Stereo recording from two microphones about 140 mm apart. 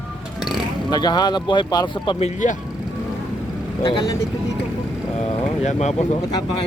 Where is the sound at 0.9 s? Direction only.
30° left (ahead or behind).